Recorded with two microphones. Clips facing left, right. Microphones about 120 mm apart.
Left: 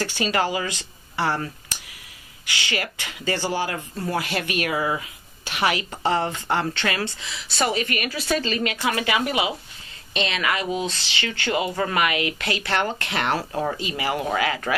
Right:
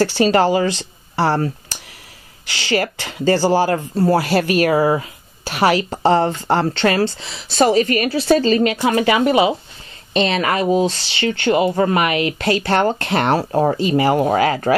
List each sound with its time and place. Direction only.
0.0 s speech: 35° right (ahead or behind)